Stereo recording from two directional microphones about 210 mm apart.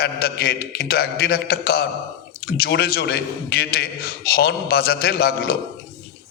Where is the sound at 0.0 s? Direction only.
45° left (ahead or behind).